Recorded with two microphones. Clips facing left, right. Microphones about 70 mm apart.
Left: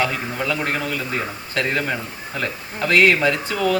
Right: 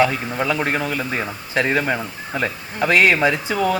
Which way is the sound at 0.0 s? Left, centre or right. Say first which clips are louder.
Right 4 dB; centre.